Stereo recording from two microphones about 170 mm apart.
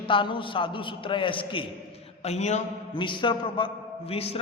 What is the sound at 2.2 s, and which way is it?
Speech, 40° left (ahead or behind).